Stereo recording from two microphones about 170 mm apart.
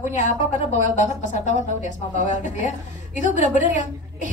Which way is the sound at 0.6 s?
45° left (ahead or behind).